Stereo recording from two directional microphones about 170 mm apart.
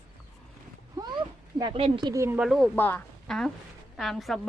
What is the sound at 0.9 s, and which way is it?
Cat, 25° right (ahead or behind).